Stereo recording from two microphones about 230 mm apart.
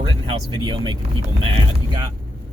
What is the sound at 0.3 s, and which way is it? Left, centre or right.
Speech, right.